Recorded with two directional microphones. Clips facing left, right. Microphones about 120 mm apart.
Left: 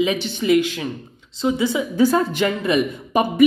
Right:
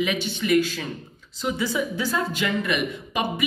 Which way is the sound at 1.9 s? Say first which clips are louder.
Left 9 dB; 50° left (ahead or behind).